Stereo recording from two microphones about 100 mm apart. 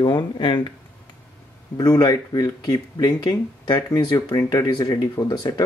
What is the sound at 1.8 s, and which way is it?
Speech, 40° left (ahead or behind).